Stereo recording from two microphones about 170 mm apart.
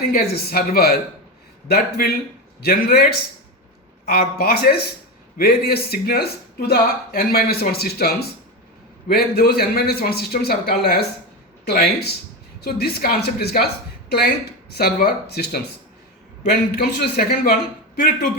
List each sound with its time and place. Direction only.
0.0 s speech: 65° left (ahead or behind)